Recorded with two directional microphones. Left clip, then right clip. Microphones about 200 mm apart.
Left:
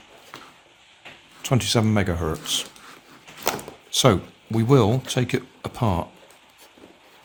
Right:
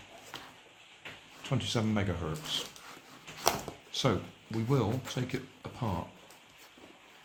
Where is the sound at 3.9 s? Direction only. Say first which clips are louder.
Left 13 dB; 65° left (ahead or behind).